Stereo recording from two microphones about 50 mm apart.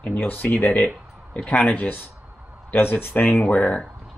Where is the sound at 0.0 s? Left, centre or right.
Left.